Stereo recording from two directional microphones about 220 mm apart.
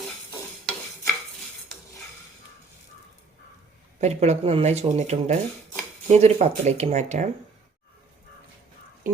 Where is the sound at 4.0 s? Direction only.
30° right (ahead or behind).